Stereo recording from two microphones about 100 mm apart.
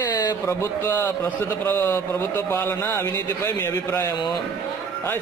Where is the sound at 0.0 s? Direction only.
40° left (ahead or behind).